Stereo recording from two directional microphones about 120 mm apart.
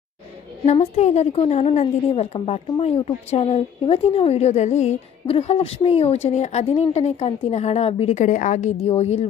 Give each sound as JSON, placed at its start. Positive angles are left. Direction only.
{"t": 0.6, "sound": "a woman's voice", "side_deg": 65}